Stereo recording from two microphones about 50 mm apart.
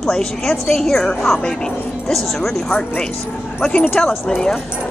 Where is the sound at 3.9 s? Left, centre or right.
Centre.